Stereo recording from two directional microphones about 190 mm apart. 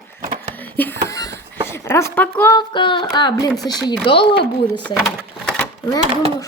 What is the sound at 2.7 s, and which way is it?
Speech, 25° left (ahead or behind).